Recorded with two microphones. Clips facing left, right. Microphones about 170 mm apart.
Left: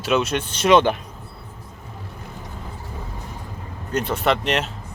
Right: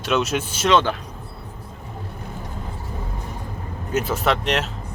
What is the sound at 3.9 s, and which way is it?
Speech, centre (ahead or behind).